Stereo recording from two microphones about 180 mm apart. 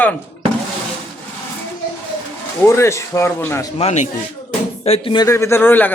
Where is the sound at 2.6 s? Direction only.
15° left (ahead or behind).